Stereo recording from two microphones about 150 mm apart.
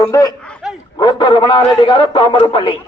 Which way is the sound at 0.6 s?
5° right (ahead or behind).